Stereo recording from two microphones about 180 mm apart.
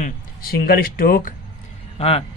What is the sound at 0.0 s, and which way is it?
Speech, 55° left (ahead or behind).